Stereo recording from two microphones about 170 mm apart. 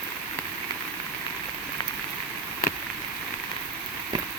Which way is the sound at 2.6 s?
60° left (ahead or behind).